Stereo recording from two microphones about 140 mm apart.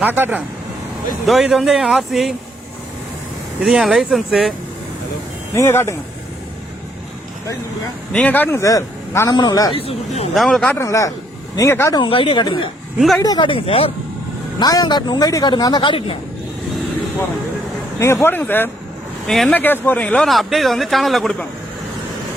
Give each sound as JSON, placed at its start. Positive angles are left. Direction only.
{"t": 0.0, "sound": "speech", "side_deg": -10}
{"t": 1.3, "sound": "a man's voice", "side_deg": 0}
{"t": 3.6, "sound": "a man's voice", "side_deg": 0}
{"t": 5.5, "sound": "speech", "side_deg": 20}
{"t": 8.1, "sound": "speech", "side_deg": 10}
{"t": 9.7, "sound": "speech", "side_deg": 45}
{"t": 10.3, "sound": "a man's voice", "side_deg": 0}
{"t": 10.8, "sound": "speech", "side_deg": 20}
{"t": 11.9, "sound": "speech", "side_deg": 40}
{"t": 14.6, "sound": "speech", "side_deg": 30}
{"t": 18.0, "sound": "speech", "side_deg": 20}
{"t": 19.3, "sound": "a man's voice", "side_deg": 0}
{"t": 19.5, "sound": "a man's voice", "side_deg": 15}